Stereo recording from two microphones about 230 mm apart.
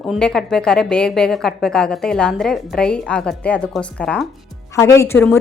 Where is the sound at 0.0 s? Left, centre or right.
Centre.